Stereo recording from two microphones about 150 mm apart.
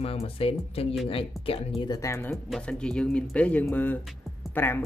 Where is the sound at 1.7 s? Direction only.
25° left (ahead or behind).